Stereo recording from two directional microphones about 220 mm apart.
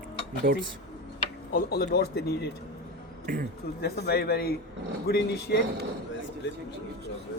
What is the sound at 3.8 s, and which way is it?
Speech, 45° left (ahead or behind).